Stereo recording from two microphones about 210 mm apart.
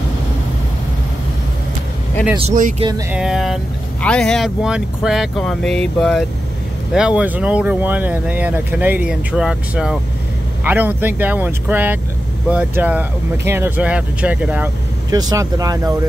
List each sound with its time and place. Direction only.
2.4 s speech: 35° right (ahead or behind)
3.1 s speech: 5° right (ahead or behind)
15.1 s speech: 20° right (ahead or behind)